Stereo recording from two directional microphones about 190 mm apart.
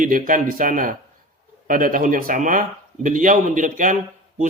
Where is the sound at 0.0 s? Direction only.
45° right (ahead or behind).